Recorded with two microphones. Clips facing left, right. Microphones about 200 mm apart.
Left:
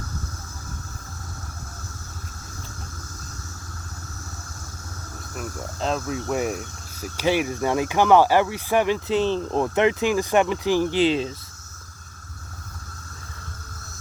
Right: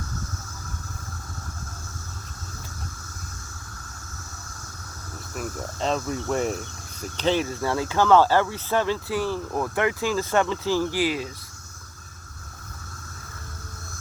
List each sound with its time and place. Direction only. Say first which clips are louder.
5.3 s speech: right 1 dB; centre (ahead or behind); by 11.3 s 25° left (ahead or behind)